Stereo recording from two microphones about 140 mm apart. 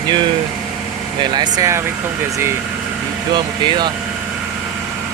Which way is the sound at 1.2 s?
30° right (ahead or behind).